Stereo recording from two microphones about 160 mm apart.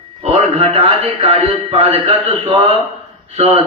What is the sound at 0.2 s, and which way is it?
Speech, 40° right (ahead or behind).